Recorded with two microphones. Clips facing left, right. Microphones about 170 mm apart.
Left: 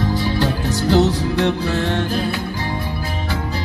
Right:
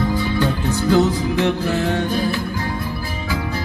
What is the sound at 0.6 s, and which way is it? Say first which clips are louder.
Music: even; 80° left.